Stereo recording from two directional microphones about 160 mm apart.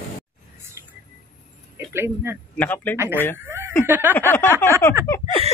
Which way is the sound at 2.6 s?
10° left (ahead or behind).